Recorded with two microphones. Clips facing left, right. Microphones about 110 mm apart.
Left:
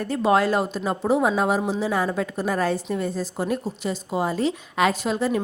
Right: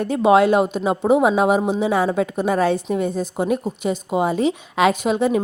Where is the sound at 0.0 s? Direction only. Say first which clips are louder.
Right 5 dB; 65° right (ahead or behind).